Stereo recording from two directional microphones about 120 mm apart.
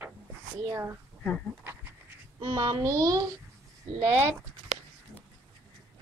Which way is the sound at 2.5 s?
30° right (ahead or behind).